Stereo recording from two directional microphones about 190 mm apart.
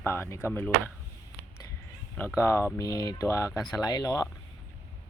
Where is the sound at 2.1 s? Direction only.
15° left (ahead or behind).